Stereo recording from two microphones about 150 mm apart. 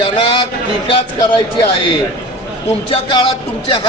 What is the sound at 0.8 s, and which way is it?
Speech, 35° left (ahead or behind).